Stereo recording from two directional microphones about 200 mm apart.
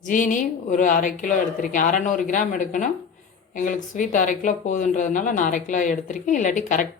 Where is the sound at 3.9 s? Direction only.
40° left (ahead or behind).